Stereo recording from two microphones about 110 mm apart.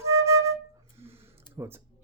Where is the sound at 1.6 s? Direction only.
30° right (ahead or behind).